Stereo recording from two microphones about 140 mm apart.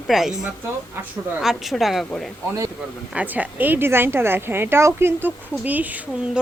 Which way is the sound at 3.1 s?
10° right (ahead or behind).